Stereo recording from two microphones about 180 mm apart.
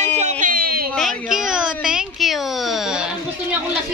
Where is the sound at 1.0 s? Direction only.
Centre (ahead or behind).